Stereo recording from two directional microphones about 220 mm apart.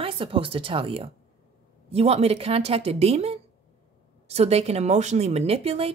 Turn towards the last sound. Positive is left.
turn(degrees=-25)  # may be behind; listen again after turning